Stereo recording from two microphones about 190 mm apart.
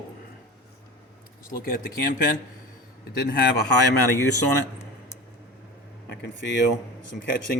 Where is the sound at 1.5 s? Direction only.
50° left (ahead or behind).